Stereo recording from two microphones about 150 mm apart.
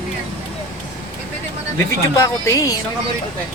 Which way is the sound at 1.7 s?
20° left (ahead or behind).